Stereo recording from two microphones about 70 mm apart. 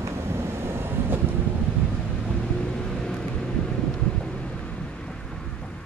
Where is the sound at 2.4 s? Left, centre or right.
Centre.